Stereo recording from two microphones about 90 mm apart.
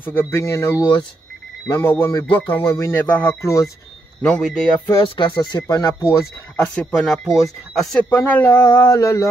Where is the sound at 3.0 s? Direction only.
15° left (ahead or behind).